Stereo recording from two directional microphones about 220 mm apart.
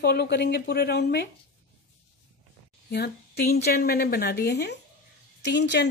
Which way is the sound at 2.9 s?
45° left (ahead or behind).